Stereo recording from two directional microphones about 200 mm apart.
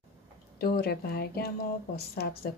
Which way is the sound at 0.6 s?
50° left (ahead or behind).